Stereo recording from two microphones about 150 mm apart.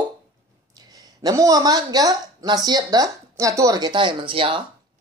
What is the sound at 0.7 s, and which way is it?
Speech, 25° right (ahead or behind).